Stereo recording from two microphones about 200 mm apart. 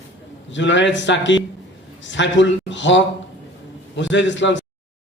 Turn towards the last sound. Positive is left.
turn(degrees=65)  # may be behind; listen again after turning